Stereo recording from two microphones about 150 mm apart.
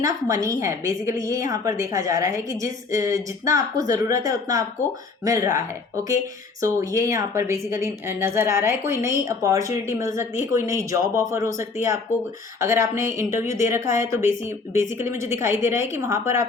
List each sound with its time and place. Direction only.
0.0 s a woman's voice: 20° right (ahead or behind)